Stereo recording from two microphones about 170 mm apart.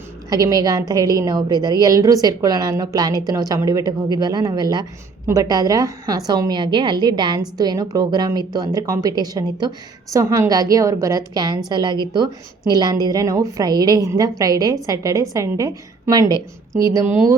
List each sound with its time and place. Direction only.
0.3 s a woman's voice: 20° right (ahead or behind)